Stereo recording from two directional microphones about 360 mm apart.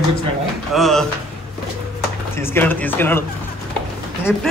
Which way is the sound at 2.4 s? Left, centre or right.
Centre.